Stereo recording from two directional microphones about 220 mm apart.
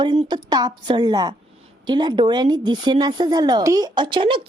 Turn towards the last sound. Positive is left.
turn(degrees=-20)  # may be behind; listen again after turning